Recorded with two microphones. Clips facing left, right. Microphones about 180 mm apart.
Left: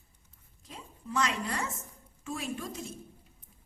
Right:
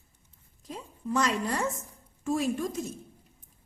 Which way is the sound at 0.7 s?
40° right (ahead or behind).